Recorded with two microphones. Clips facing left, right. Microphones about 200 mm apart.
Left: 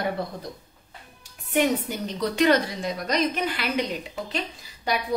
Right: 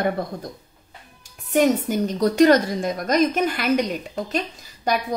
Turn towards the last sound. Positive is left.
turn(degrees=-45)  # may be behind; listen again after turning